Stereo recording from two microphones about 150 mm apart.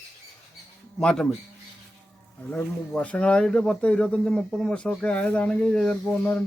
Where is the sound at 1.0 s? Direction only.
5° left (ahead or behind).